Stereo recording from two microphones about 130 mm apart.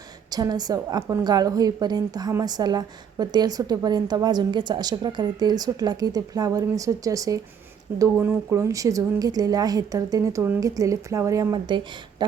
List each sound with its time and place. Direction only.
0.3 s a woman's voice: 30° right (ahead or behind)